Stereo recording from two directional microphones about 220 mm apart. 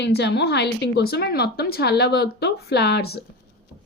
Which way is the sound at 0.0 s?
50° left (ahead or behind).